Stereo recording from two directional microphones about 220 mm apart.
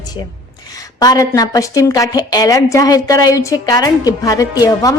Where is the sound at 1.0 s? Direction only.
15° left (ahead or behind).